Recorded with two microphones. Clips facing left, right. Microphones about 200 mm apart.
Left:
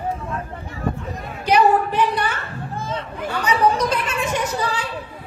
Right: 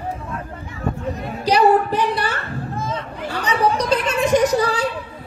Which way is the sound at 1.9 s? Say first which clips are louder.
Even; 35° right (ahead or behind).